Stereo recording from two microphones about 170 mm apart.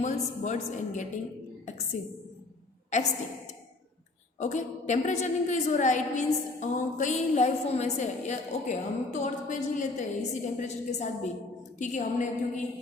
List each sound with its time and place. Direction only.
0.0 s a woman's voice: 45° left (ahead or behind)
2.9 s a woman's voice: 45° left (ahead or behind)